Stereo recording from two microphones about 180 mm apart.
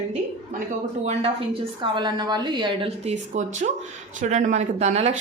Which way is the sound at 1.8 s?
25° right (ahead or behind).